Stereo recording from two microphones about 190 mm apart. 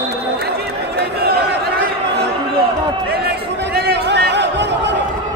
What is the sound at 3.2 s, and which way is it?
Chatter, 55° right (ahead or behind).